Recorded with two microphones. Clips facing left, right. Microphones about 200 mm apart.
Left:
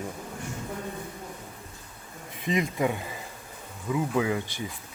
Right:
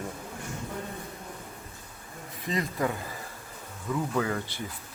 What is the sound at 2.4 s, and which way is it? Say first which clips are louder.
Speech: left 3 dB; 20° left (ahead or behind).